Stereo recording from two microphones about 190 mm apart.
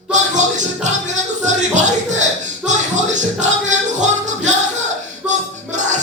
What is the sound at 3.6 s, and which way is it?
Music, 40° right (ahead or behind).